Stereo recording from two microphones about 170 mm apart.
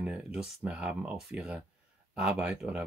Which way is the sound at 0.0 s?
5° right (ahead or behind).